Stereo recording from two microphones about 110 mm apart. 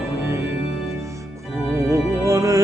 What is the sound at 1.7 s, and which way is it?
Music, 30° right (ahead or behind).